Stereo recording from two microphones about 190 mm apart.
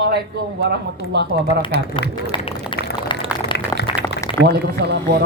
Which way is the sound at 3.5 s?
60° left (ahead or behind).